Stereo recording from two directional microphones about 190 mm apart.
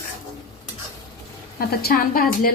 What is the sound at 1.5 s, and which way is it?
Speech, 50° left (ahead or behind).